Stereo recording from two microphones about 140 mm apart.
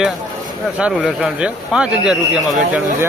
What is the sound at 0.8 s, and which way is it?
Speech, 5° right (ahead or behind).